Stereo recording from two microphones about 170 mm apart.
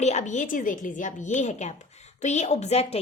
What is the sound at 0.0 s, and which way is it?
A woman's voice, 45° left (ahead or behind).